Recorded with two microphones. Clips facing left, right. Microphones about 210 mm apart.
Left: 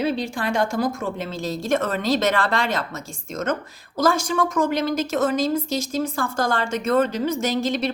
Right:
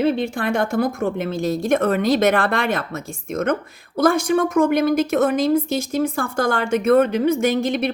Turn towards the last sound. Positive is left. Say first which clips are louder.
# right 3 dB
turn(degrees=-55)  # may be behind; listen again after turning